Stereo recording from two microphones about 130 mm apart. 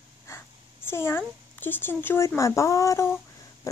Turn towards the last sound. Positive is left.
turn(degrees=20)  # may be behind; listen again after turning